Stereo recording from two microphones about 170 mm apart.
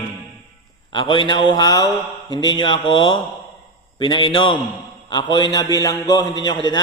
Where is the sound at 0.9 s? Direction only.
30° left (ahead or behind).